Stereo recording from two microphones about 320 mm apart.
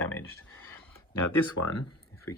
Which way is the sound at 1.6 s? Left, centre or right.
Left.